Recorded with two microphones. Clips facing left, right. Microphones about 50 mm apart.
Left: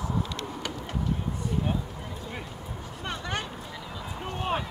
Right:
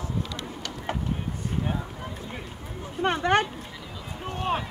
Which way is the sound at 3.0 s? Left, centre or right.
Right.